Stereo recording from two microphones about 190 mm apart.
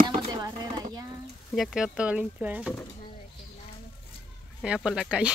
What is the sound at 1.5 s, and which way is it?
Speech, centre (ahead or behind).